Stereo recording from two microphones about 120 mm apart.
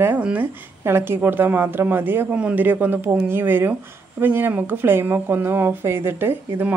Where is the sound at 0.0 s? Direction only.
15° right (ahead or behind).